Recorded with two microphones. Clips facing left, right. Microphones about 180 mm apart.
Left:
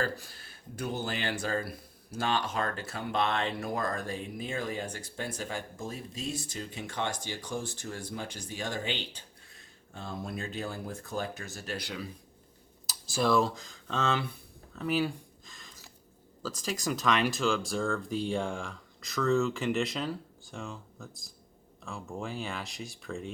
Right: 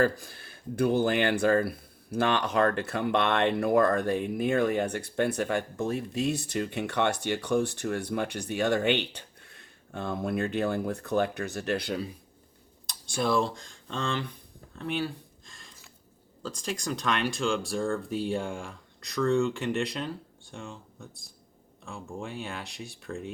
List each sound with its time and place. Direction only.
0.0 s speech: 55° right (ahead or behind)
12.9 s speech: centre (ahead or behind)
15.4 s squish: centre (ahead or behind)
16.4 s speech: 5° left (ahead or behind)